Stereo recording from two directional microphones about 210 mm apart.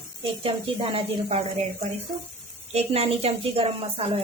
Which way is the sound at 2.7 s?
30° right (ahead or behind).